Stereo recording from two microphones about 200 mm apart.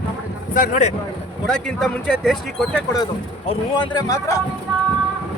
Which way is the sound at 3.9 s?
15° left (ahead or behind).